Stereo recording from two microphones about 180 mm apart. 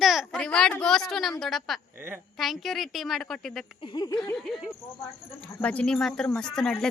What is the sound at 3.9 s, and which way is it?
Speech, 20° left (ahead or behind).